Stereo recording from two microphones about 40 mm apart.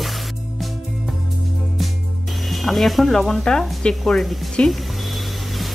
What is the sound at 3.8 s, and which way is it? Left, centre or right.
Speech, left.